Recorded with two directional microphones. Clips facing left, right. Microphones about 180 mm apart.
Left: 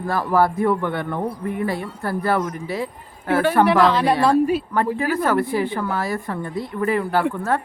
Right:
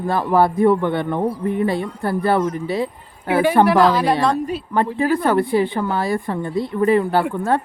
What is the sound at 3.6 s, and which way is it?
Speech, centre (ahead or behind).